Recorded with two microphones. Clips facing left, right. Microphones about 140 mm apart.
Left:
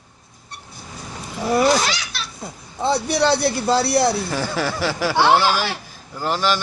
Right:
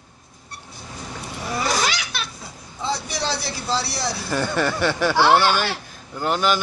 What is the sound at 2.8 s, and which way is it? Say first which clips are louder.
A man's voice: left 8 dB; 60° left (ahead or behind).